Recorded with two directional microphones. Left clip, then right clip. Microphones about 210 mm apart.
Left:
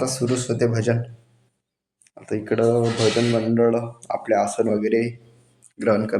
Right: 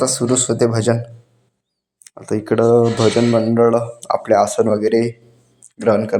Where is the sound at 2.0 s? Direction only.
20° right (ahead or behind).